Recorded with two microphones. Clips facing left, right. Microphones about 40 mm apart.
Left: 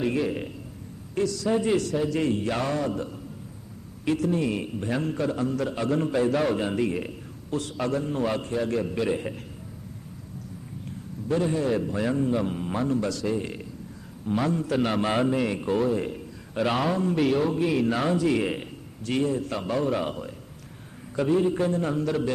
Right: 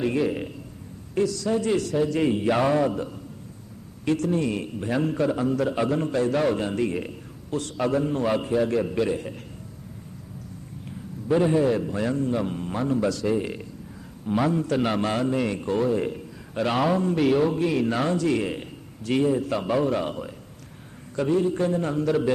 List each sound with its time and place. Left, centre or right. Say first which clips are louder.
0.0 s a man's voice: right 2 dB; centre
1.5 s a man's voice: even; centre
1.7 s a man's voice: right 1 dB; centre
2.2 s a sound: right 4 dB; centre
4.0 s a man's voice: right 1 dB; centre
9.0 s a man's voice: even; centre
11.3 s a sound: right 5 dB; centre
11.6 s a man's voice: right 2 dB; centre
19.0 s a man's voice: right 3 dB; centre